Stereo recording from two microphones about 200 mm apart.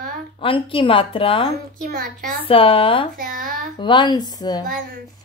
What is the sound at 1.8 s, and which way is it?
Speech, 50° right (ahead or behind).